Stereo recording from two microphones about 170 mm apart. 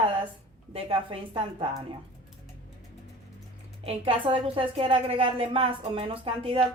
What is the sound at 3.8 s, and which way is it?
A woman's voice, 35° right (ahead or behind).